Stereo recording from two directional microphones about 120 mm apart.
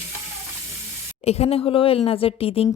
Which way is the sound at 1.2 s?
60° left (ahead or behind).